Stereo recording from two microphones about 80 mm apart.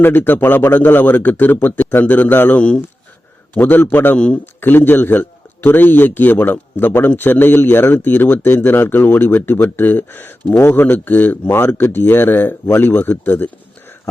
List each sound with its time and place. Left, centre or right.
0.0 s a man's voice: left